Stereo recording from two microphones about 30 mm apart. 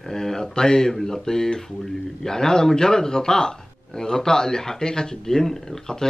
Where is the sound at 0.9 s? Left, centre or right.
Centre.